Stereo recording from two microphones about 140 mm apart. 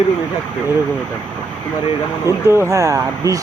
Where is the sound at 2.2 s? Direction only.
20° right (ahead or behind).